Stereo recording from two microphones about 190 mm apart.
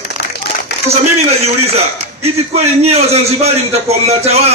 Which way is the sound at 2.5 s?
35° right (ahead or behind).